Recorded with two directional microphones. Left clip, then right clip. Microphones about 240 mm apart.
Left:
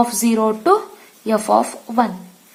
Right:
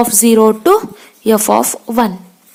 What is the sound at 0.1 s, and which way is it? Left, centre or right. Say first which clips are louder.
Speech: right 8 dB; right.